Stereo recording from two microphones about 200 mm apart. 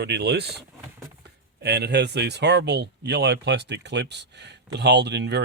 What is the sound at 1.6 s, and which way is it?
Speech, 55° right (ahead or behind).